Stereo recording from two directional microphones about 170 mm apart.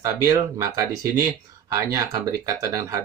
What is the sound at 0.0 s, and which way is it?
Speech, 20° right (ahead or behind).